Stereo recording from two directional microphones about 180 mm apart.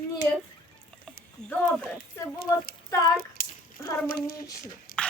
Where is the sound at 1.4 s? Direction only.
5° left (ahead or behind).